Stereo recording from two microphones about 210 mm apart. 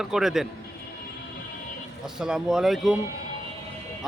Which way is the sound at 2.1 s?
5° right (ahead or behind).